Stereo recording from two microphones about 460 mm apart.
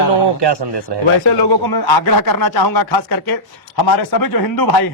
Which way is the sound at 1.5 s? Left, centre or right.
Left.